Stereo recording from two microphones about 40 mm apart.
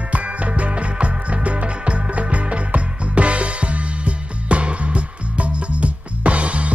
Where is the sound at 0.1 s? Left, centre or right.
Right.